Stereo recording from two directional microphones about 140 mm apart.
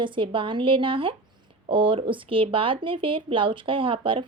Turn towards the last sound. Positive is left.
turn(degrees=-40)  # may be behind; listen again after turning